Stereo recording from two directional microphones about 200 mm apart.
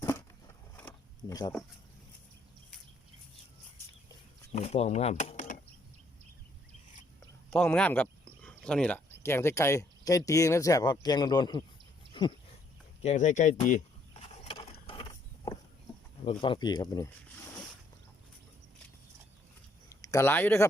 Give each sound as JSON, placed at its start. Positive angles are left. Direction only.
{"t": 0.8, "sound": "a sound", "side_deg": 15}
{"t": 4.5, "sound": "speech", "side_deg": 30}
{"t": 7.5, "sound": "speech", "side_deg": 5}
{"t": 13.0, "sound": "speech", "side_deg": 35}
{"t": 14.4, "sound": "vehicle", "side_deg": 25}
{"t": 16.2, "sound": "speech", "side_deg": 25}
{"t": 19.9, "sound": "speech", "side_deg": 15}